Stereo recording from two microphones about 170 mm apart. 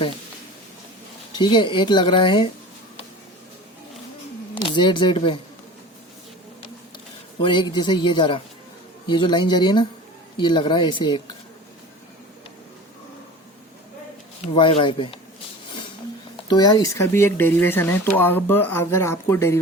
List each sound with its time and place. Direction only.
1.3 s speech: 25° left (ahead or behind)
4.5 s speech: 30° left (ahead or behind)
7.3 s speech: 25° left (ahead or behind)
14.4 s speech: 35° left (ahead or behind)
16.5 s speech: 25° left (ahead or behind)